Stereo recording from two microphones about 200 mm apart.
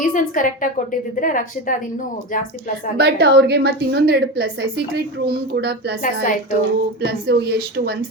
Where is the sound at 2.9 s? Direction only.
55° right (ahead or behind).